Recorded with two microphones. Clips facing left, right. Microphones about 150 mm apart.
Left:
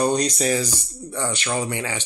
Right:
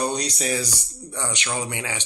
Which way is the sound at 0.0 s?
50° left (ahead or behind).